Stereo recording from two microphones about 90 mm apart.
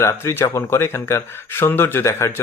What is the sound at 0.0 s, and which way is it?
Speech, 35° left (ahead or behind).